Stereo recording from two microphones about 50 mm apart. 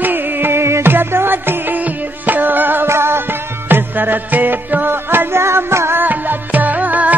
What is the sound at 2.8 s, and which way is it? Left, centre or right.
Music, right.